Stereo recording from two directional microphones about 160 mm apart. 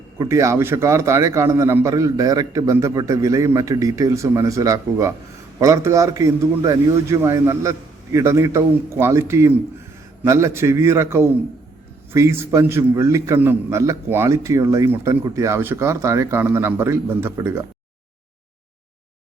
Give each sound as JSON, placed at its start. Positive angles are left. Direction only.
{"t": 0.2, "sound": "a man's voice", "side_deg": -20}